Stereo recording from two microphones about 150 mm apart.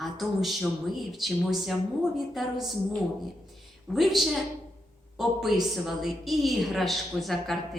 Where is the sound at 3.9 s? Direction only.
Centre (ahead or behind).